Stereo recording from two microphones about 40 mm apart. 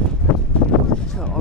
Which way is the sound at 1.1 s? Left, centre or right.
Centre.